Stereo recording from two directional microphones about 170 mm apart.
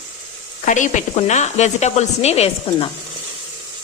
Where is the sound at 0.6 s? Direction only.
45° left (ahead or behind).